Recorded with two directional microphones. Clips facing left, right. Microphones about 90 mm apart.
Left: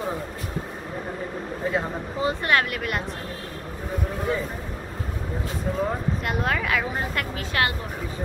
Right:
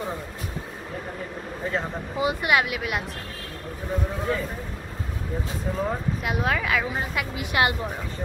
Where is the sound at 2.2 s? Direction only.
10° right (ahead or behind).